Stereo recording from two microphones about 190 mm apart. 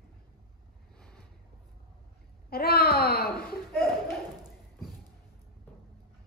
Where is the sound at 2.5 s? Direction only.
55° left (ahead or behind).